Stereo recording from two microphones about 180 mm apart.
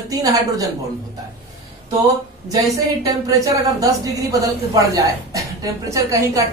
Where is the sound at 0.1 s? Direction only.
20° right (ahead or behind).